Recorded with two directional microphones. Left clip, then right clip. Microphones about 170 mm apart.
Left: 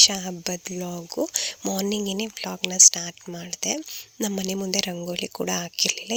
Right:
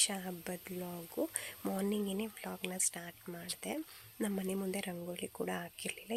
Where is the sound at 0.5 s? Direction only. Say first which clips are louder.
Left 12 dB; 80° left.